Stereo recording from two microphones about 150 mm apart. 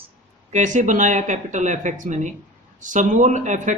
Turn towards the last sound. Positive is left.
turn(degrees=-55)  # may be behind; listen again after turning